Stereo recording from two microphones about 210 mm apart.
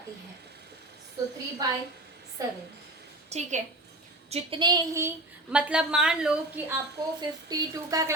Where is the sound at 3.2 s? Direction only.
30° right (ahead or behind).